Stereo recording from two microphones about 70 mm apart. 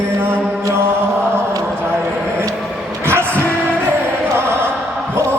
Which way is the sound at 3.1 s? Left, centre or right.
Right.